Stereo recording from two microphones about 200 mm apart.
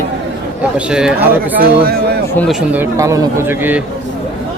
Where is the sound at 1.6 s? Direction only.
50° right (ahead or behind).